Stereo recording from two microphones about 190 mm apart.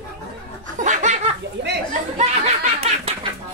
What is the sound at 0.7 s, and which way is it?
Snicker, 40° right (ahead or behind).